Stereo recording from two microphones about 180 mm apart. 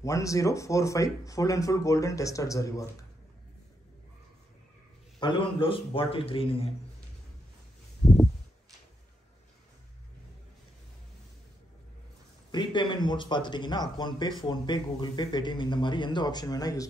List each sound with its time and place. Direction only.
0.0 s speech: 20° left (ahead or behind)
5.2 s a man's voice: 25° left (ahead or behind)
12.4 s a man's voice: 25° left (ahead or behind)